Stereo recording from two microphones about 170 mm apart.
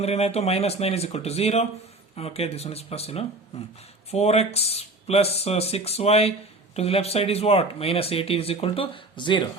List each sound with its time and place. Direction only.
0.0 s speech: 35° left (ahead or behind)